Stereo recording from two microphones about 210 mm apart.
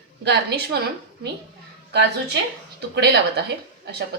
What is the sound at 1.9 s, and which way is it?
Speech, 55° right (ahead or behind).